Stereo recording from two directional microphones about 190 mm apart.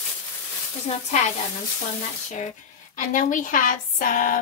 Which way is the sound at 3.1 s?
45° left (ahead or behind).